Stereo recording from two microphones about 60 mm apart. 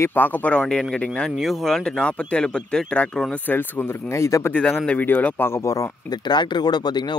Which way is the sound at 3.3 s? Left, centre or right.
Left.